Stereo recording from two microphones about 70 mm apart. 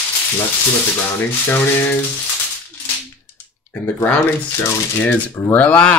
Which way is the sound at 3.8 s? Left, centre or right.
Left.